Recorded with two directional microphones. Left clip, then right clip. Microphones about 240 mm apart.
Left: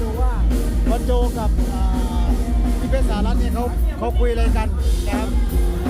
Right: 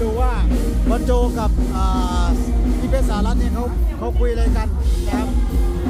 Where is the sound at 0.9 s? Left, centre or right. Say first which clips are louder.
Right 2 dB; centre.